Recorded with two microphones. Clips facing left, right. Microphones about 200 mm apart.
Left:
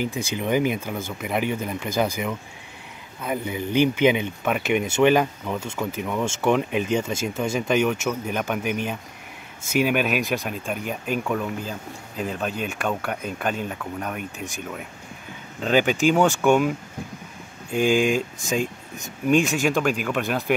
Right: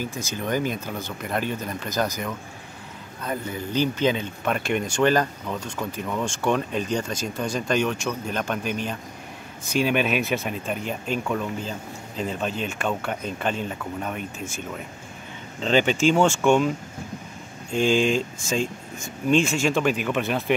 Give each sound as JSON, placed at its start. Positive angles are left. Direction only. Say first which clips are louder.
{"t": 0.0, "sound": "speech", "louder": "left 3 dB", "side_deg": 15}
{"t": 4.6, "sound": "speech", "louder": "left 4 dB", "side_deg": 5}
{"t": 4.8, "sound": "speech", "louder": "left 3 dB", "side_deg": 25}
{"t": 5.2, "sound": "speech", "louder": "left 2 dB", "side_deg": 5}
{"t": 15.6, "sound": "speech", "louder": "even", "side_deg": 5}
{"t": 19.6, "sound": "speech", "louder": "even", "side_deg": 0}